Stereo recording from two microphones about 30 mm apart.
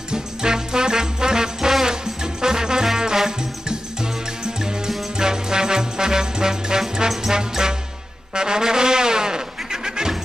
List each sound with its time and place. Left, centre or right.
0.1 s music: right
8.4 s trombone: right